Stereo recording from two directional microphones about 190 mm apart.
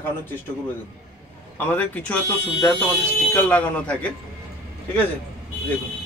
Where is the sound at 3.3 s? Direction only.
5° left (ahead or behind).